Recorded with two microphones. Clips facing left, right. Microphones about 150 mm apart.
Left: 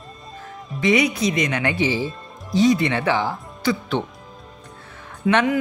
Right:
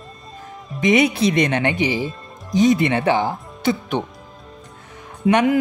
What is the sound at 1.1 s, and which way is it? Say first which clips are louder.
Speech: right 4 dB; 60° right (ahead or behind).